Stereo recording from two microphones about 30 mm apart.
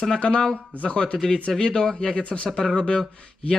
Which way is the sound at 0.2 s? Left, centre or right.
Left.